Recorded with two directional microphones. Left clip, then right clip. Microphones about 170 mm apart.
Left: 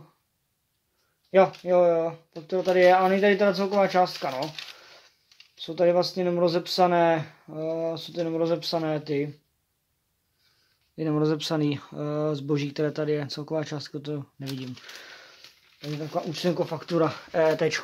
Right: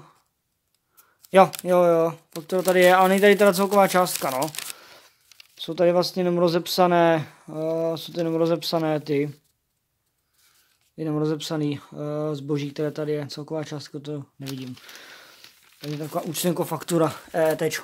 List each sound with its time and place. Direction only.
1.3 s speech: 55° right (ahead or behind)
4.3 s speech: 75° right (ahead or behind)
4.7 s a sound: 50° right (ahead or behind)
5.4 s speech: 55° right (ahead or behind)
11.0 s speech: 5° right (ahead or behind)
14.4 s speech: 20° right (ahead or behind)
15.4 s a sound: 65° right (ahead or behind)
16.0 s speech: 35° right (ahead or behind)
17.0 s speech: 15° right (ahead or behind)